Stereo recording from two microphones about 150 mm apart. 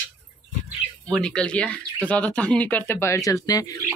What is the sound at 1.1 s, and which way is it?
Speech, 5° left (ahead or behind).